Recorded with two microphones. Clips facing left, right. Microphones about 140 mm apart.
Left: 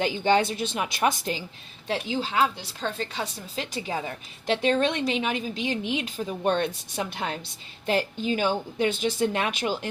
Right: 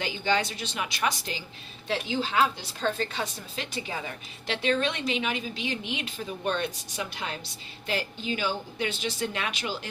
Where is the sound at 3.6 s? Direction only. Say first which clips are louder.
Left 4 dB; 40° left (ahead or behind).